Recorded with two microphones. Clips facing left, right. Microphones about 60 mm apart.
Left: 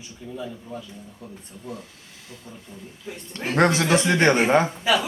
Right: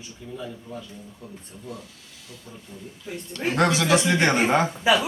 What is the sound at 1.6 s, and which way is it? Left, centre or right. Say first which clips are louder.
Speech: left 2 dB; left.